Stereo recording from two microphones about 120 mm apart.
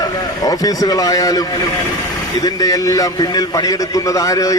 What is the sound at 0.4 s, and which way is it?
A man's voice, 30° left (ahead or behind).